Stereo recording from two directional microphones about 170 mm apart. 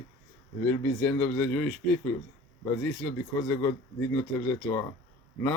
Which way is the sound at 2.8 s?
15° left (ahead or behind).